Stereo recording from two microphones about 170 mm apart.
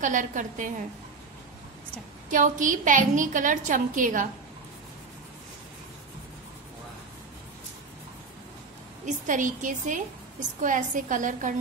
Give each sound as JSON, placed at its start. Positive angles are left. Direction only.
{"t": 0.0, "sound": "a woman's voice", "side_deg": -50}
{"t": 2.2, "sound": "a woman's voice", "side_deg": -50}
{"t": 9.0, "sound": "a woman's voice", "side_deg": -50}